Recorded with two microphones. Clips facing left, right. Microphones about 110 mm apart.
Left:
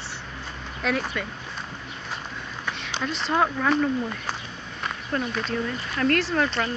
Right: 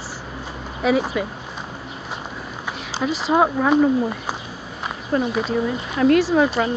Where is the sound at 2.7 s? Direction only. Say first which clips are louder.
Right 6 dB; 5° right (ahead or behind).